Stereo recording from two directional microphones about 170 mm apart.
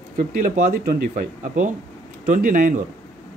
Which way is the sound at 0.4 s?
50° right (ahead or behind).